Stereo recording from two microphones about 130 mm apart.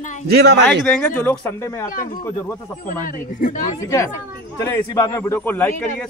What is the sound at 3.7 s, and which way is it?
Speech, 25° left (ahead or behind).